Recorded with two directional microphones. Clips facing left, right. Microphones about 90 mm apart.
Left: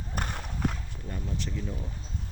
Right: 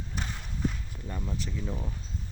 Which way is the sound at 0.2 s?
60° left (ahead or behind).